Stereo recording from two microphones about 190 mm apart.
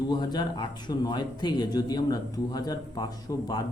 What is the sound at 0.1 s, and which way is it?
Speech, 20° left (ahead or behind).